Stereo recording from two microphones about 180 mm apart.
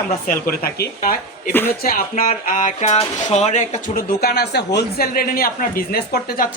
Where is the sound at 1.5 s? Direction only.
10° left (ahead or behind).